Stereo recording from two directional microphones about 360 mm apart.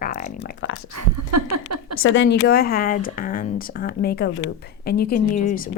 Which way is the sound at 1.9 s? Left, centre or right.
Left.